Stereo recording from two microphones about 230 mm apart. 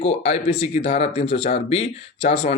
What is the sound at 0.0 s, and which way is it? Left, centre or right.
Speech, left.